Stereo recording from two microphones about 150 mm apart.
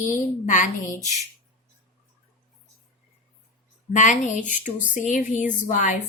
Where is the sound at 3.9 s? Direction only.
55° left (ahead or behind).